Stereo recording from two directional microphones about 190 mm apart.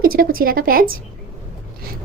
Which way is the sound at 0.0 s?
50° right (ahead or behind).